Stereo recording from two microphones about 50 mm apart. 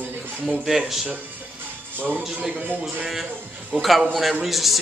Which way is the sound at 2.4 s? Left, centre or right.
Right.